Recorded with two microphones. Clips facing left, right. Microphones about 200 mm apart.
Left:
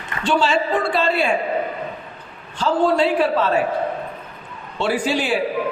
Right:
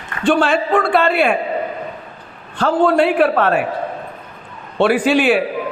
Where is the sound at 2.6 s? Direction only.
60° right (ahead or behind).